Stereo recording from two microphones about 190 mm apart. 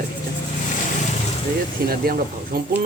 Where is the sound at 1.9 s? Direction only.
50° right (ahead or behind).